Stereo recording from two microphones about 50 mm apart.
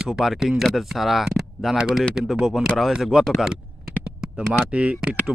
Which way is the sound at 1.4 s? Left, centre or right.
Centre.